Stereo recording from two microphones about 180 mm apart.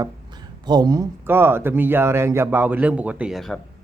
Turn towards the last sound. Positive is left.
turn(degrees=0)  # may be behind; listen again after turning